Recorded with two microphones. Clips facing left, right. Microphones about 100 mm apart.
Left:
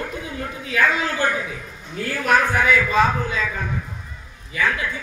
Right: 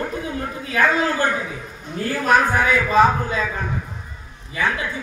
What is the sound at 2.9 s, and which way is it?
Speech, 35° right (ahead or behind).